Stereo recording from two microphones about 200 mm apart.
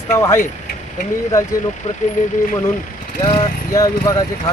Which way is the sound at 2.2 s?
40° left (ahead or behind).